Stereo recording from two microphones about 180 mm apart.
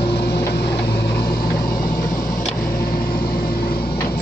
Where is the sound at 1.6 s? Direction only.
55° left (ahead or behind).